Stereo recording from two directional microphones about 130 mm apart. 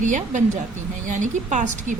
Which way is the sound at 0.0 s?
75° right (ahead or behind).